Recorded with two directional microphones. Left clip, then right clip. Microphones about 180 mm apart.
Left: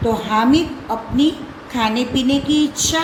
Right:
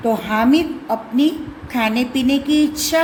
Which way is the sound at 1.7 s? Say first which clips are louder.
Even; 50° right (ahead or behind).